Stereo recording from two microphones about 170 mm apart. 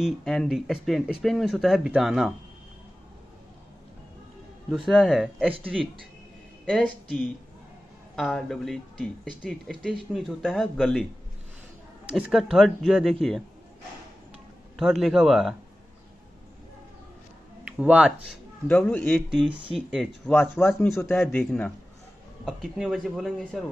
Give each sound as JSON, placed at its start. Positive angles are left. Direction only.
{"t": 0.0, "sound": "speech", "side_deg": 0}
{"t": 4.8, "sound": "speech", "side_deg": -5}
{"t": 12.1, "sound": "speech", "side_deg": -5}
{"t": 14.8, "sound": "speech", "side_deg": 0}
{"t": 17.7, "sound": "speech", "side_deg": -5}
{"t": 18.7, "sound": "a man's voice", "side_deg": 10}
{"t": 19.1, "sound": "speech", "side_deg": 0}
{"t": 22.8, "sound": "speech", "side_deg": 0}